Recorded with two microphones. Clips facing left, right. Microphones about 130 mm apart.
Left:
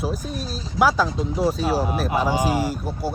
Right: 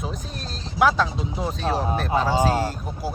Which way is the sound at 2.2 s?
15° left (ahead or behind).